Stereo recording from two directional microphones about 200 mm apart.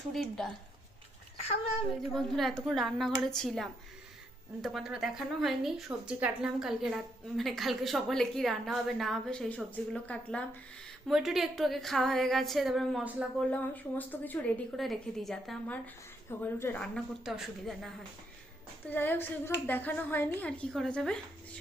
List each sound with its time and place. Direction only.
0.1 s a woman's voice: centre (ahead or behind)
1.4 s a child's voice: 30° left (ahead or behind)
2.0 s a woman's voice: centre (ahead or behind)
13.5 s a woman's voice: 10° left (ahead or behind)
18.9 s a woman's voice: 10° left (ahead or behind)